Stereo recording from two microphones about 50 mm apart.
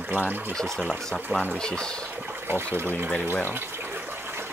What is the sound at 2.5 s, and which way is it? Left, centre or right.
Speech, right.